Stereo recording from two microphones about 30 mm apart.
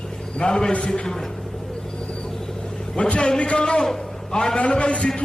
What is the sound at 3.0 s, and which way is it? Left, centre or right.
A man's voice, left.